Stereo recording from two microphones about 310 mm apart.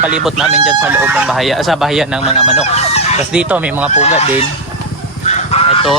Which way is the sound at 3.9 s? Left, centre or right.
Left.